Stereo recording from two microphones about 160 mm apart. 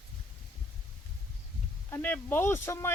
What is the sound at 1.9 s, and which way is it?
Speech, 10° left (ahead or behind).